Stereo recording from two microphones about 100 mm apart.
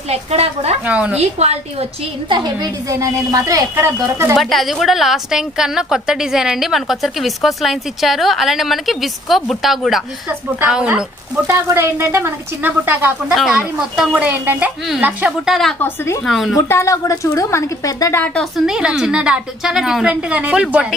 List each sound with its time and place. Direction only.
0.1 s a woman's voice: 90° right
0.9 s a woman's voice: 10° right (ahead or behind)
2.3 s a woman's voice: 45° right (ahead or behind); by 4.4 s 25° right (ahead or behind)
4.4 s a woman's voice: centre (ahead or behind)
10.2 s a woman's voice: 10° right (ahead or behind)
11.4 s speech: 25° right (ahead or behind)
13.3 s a woman's voice: 5° right (ahead or behind)
14.1 s a woman's voice: 20° right (ahead or behind)
15.4 s a woman's voice: centre (ahead or behind)
15.8 s a woman's voice: 30° left (ahead or behind)
16.2 s a woman's voice: centre (ahead or behind)
16.6 s a woman's voice: 30° left (ahead or behind)
18.3 s a woman's voice: 5° right (ahead or behind)